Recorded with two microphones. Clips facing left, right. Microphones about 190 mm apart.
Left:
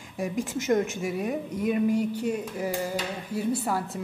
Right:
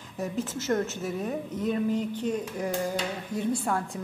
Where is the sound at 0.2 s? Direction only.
15° left (ahead or behind).